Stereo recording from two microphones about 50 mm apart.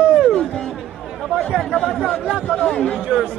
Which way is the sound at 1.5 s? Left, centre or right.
Centre.